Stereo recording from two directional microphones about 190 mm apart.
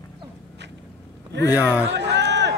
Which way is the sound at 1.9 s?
65° right (ahead or behind).